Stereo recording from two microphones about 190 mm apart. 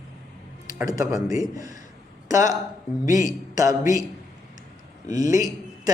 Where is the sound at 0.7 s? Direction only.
20° right (ahead or behind).